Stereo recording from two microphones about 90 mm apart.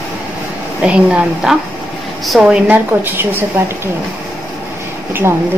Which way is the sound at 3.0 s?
25° right (ahead or behind).